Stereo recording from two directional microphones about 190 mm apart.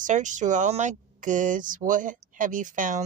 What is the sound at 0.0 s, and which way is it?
Speech, 40° right (ahead or behind).